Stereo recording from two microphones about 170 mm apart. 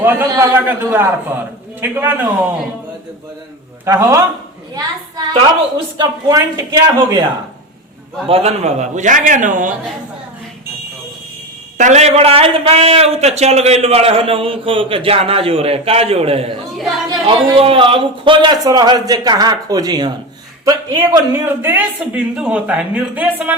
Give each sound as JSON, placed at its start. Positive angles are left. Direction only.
{"t": 0.0, "sound": "speech", "side_deg": -15}
{"t": 3.8, "sound": "a man's voice", "side_deg": -20}
{"t": 8.3, "sound": "a man's voice", "side_deg": -35}
{"t": 11.8, "sound": "a man's voice", "side_deg": -45}
{"t": 21.4, "sound": "speech", "side_deg": -10}